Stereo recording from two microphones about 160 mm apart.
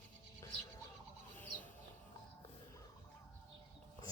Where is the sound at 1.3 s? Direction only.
10° left (ahead or behind).